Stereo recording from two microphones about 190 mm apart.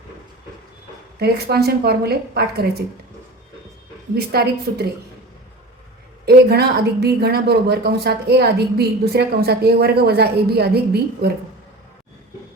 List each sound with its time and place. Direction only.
1.2 s a woman's voice: 55° right (ahead or behind)
4.1 s a woman's voice: 55° right (ahead or behind)
6.2 s a woman's voice: 55° right (ahead or behind)